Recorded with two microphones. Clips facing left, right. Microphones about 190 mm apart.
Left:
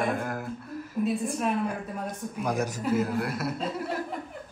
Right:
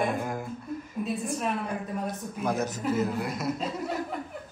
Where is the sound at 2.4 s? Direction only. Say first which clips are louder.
Even; 10° left (ahead or behind).